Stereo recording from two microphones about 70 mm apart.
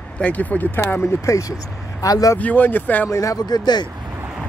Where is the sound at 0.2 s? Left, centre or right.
Left.